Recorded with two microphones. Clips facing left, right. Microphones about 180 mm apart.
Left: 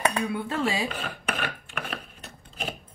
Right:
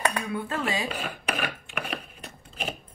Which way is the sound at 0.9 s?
5° right (ahead or behind).